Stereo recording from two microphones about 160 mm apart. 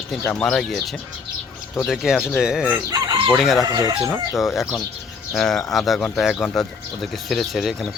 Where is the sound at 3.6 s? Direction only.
25° right (ahead or behind).